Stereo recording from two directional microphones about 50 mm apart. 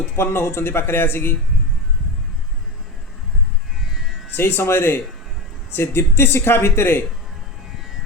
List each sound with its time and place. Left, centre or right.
0.2 s speech: left
3.8 s vehicle: centre
4.4 s speech: left